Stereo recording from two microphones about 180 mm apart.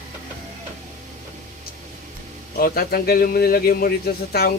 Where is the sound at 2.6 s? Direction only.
55° left (ahead or behind).